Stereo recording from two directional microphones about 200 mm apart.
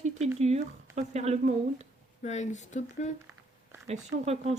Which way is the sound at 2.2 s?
35° left (ahead or behind).